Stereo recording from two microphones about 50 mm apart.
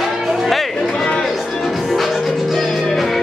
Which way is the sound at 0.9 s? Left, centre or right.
Centre.